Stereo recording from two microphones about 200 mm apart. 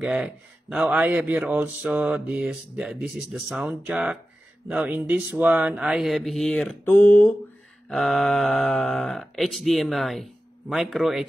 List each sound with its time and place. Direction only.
0.0 s speech: 5° right (ahead or behind)